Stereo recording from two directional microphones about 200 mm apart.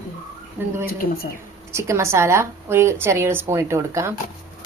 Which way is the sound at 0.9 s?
50° left (ahead or behind).